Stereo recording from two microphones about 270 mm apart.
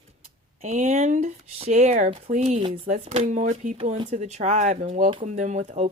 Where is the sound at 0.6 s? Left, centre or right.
Right.